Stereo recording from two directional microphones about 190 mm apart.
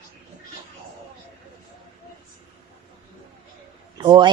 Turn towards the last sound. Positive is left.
turn(degrees=-25)  # may be behind; listen again after turning